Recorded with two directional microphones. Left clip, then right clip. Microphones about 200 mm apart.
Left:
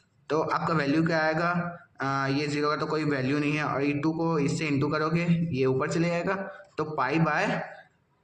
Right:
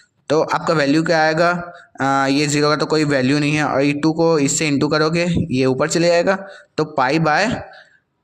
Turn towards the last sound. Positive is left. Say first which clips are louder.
# right 10 dB
turn(degrees=-50)  # may be behind; listen again after turning